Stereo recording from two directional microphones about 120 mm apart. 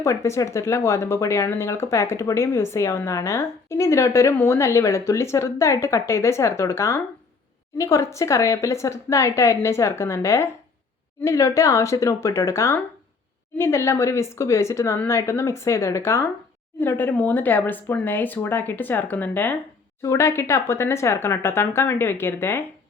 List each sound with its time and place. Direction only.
0.0 s speech: 25° left (ahead or behind)